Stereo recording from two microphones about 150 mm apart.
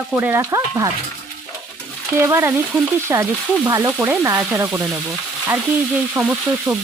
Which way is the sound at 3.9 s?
15° right (ahead or behind).